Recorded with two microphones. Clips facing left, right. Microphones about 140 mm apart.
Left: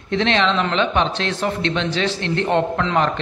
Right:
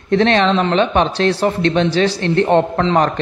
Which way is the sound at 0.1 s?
45° right (ahead or behind).